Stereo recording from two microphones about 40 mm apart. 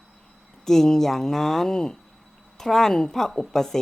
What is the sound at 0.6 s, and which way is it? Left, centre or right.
Speech, centre.